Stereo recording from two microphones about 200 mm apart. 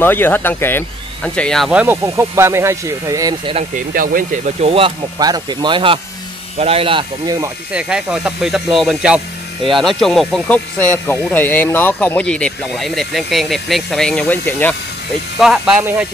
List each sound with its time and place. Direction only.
0.0 s speech: 10° left (ahead or behind); by 3.6 s 20° right (ahead or behind)
3.7 s speech: 45° right (ahead or behind)
4.6 s speech: 30° right (ahead or behind)
7.3 s speech: 5° right (ahead or behind)
15.3 s speech: 5° right (ahead or behind)